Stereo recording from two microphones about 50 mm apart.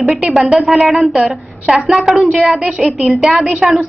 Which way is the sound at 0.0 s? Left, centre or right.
Centre.